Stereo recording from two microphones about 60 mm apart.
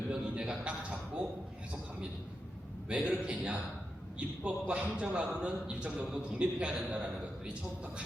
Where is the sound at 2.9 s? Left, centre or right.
Centre.